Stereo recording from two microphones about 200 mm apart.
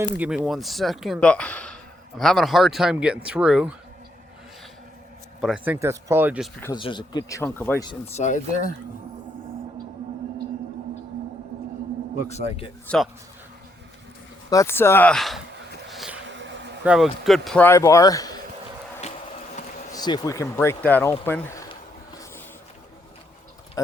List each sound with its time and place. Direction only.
0.2 s speech: 5° right (ahead or behind)
5.4 s speech: 5° right (ahead or behind)
6.7 s speech: 25° left (ahead or behind)
7.9 s speech: 30° left (ahead or behind)
12.3 s speech: 30° left (ahead or behind)
14.5 s speech: 15° left (ahead or behind)
15.9 s a sound: centre (ahead or behind)
16.3 s a sound: 65° right (ahead or behind)
16.8 s speech: 5° right (ahead or behind); by 18.3 s 20° left (ahead or behind)
19.9 s speech: 20° left (ahead or behind)
23.8 s a sound: 15° left (ahead or behind)